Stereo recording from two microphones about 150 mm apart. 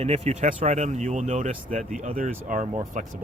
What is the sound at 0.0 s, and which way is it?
Speech, 45° right (ahead or behind).